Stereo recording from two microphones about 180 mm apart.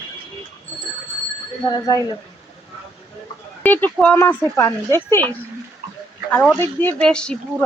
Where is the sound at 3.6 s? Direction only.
10° left (ahead or behind).